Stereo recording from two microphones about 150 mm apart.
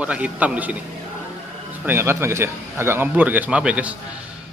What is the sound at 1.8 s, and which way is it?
A man's voice, 15° right (ahead or behind).